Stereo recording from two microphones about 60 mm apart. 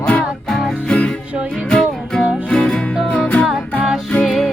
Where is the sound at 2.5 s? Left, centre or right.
Centre.